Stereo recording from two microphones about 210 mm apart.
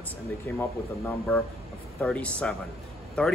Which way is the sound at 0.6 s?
5° left (ahead or behind).